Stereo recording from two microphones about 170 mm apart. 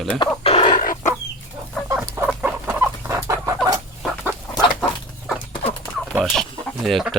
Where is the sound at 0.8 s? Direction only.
55° left (ahead or behind).